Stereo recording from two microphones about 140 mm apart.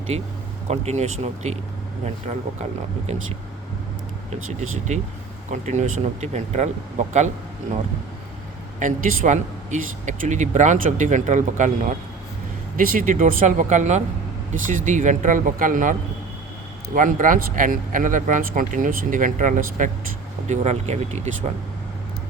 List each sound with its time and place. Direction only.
0.1 s speech: 50° right (ahead or behind)
4.9 s speech: 55° right (ahead or behind)
8.8 s speech: 60° right (ahead or behind)
12.7 s speech: 85° right; by 19.9 s 65° right (ahead or behind)
20.5 s speech: 50° right (ahead or behind)